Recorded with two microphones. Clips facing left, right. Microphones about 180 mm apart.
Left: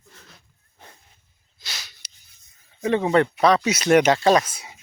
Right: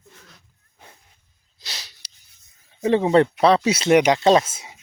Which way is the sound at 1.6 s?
35° right (ahead or behind).